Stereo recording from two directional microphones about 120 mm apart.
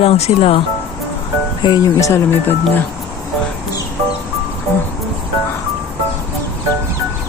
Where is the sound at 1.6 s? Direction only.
30° left (ahead or behind).